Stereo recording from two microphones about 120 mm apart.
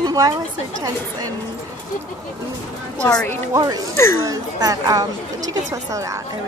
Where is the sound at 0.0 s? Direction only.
30° right (ahead or behind).